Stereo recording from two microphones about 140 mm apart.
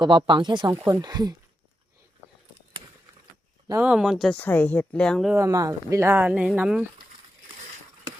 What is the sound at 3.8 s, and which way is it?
Speech, 5° right (ahead or behind).